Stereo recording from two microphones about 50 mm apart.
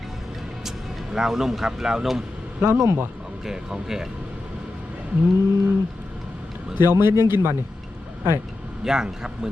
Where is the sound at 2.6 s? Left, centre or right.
Right.